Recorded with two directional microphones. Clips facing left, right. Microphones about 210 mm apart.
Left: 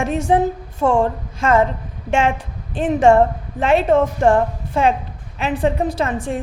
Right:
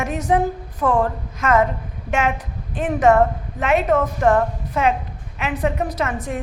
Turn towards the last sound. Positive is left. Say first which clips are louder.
# left 3 dB
turn(degrees=30)  # may be behind; listen again after turning